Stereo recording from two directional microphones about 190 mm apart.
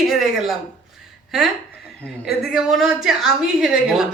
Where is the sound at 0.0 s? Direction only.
Centre (ahead or behind).